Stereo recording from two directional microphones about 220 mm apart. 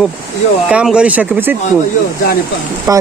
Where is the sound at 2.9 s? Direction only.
15° right (ahead or behind).